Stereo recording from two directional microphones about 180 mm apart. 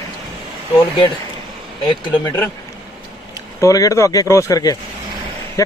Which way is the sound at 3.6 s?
20° left (ahead or behind).